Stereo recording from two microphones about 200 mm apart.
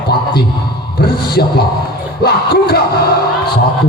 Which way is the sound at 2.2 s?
50° left (ahead or behind).